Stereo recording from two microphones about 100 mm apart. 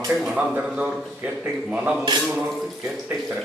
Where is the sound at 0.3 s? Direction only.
10° right (ahead or behind).